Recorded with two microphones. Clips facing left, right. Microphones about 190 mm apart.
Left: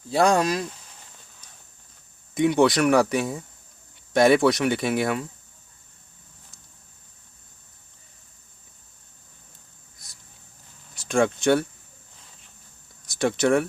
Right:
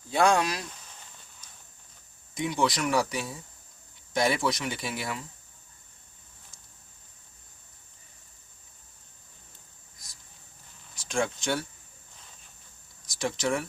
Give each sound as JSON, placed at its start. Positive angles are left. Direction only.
{"t": 0.1, "sound": "speech", "side_deg": 40}
{"t": 2.3, "sound": "speech", "side_deg": 60}
{"t": 11.1, "sound": "speech", "side_deg": 60}
{"t": 13.1, "sound": "speech", "side_deg": 60}